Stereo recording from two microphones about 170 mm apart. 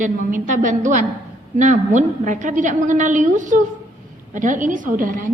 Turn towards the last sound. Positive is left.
turn(degrees=-55)  # may be behind; listen again after turning